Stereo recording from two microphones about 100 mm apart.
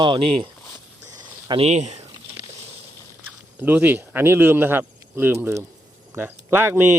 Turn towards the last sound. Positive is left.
turn(degrees=-25)  # may be behind; listen again after turning